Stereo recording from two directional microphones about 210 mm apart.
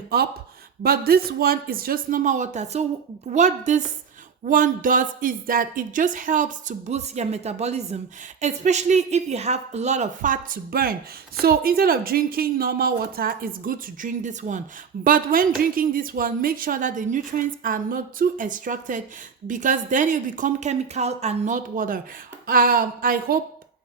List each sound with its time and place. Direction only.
0.1 s a woman's voice: 45° right (ahead or behind)